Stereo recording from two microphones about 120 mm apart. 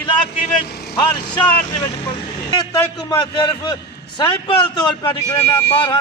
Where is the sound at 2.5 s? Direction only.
35° left (ahead or behind).